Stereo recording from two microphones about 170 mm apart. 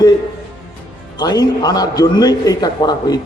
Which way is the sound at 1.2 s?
25° left (ahead or behind).